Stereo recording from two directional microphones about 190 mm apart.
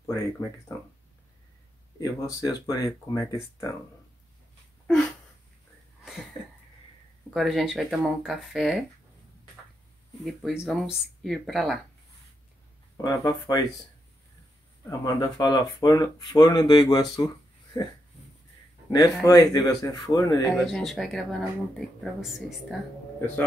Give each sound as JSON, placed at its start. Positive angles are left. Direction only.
{"t": 0.0, "sound": "speech", "side_deg": 15}
{"t": 2.0, "sound": "speech", "side_deg": 20}
{"t": 7.3, "sound": "speech", "side_deg": 0}
{"t": 10.2, "sound": "speech", "side_deg": 0}
{"t": 12.9, "sound": "speech", "side_deg": 20}
{"t": 14.9, "sound": "speech", "side_deg": 20}
{"t": 20.5, "sound": "speech", "side_deg": 0}